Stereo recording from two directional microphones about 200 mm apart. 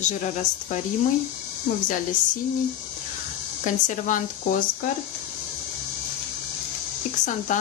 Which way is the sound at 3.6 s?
40° left (ahead or behind).